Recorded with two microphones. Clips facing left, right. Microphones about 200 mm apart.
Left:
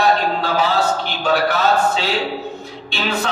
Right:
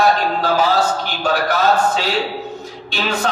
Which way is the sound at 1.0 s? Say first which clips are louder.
Left 1 dB; 45° right (ahead or behind).